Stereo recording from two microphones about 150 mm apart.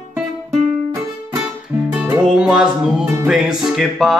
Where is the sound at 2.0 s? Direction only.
5° right (ahead or behind).